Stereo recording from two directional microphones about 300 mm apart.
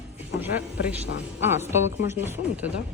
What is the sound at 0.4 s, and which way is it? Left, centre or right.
A woman's voice, centre.